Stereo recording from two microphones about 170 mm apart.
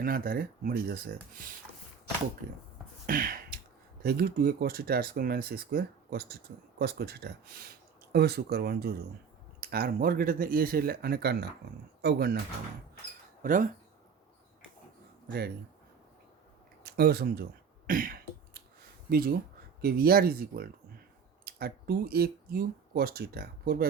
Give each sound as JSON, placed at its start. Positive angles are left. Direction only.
{"t": 0.0, "sound": "speech", "side_deg": -60}
{"t": 3.1, "sound": "a sound", "side_deg": -55}
{"t": 4.0, "sound": "speech", "side_deg": -65}
{"t": 13.4, "sound": "speech", "side_deg": -50}
{"t": 16.8, "sound": "speech", "side_deg": -70}
{"t": 17.8, "sound": "throat clearing", "side_deg": -55}
{"t": 19.1, "sound": "speech", "side_deg": -60}